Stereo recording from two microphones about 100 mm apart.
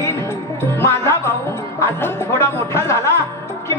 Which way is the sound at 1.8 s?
25° left (ahead or behind).